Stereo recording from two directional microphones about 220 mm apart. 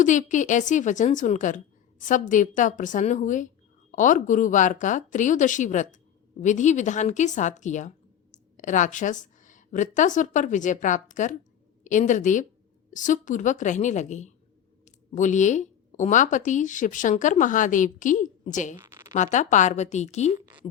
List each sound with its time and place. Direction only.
0.0 s speech: 35° left (ahead or behind)
18.8 s a sound: 10° right (ahead or behind)
19.1 s speech: 35° left (ahead or behind)